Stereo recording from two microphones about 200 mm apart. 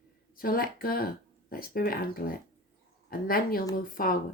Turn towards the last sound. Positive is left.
turn(degrees=45)  # may be behind; listen again after turning